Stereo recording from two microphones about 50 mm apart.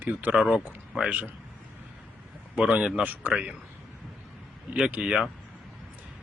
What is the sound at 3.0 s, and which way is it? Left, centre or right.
Speech, right.